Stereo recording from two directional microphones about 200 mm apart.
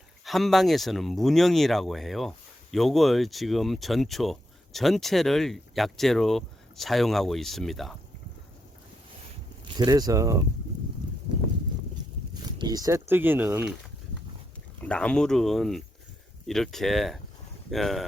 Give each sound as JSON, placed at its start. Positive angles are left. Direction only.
{"t": 0.3, "sound": "speech", "side_deg": 0}
{"t": 9.6, "sound": "speech", "side_deg": -20}
{"t": 12.5, "sound": "speech", "side_deg": -20}
{"t": 14.8, "sound": "speech", "side_deg": 5}